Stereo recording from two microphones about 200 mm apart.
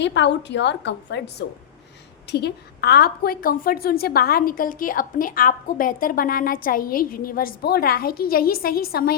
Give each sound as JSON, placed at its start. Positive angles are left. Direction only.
{"t": 0.0, "sound": "a woman's voice", "side_deg": 60}